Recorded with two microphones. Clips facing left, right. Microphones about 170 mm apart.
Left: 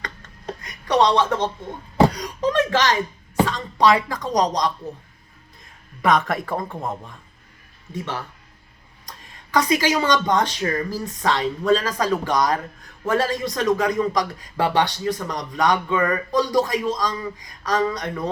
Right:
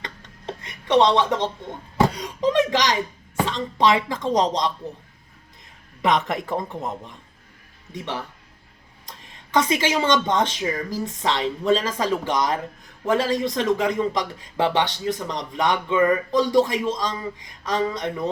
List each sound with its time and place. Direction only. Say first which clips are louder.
0.0 s a sound: left 1 dB; 25° right (ahead or behind)
0.9 s speech: even; 20° right (ahead or behind)
6.0 s speech: left 2 dB; 20° right (ahead or behind)
9.0 s speech: left 1 dB; 25° right (ahead or behind)